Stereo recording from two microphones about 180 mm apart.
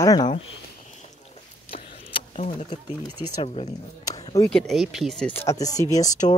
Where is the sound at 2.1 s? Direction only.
35° left (ahead or behind).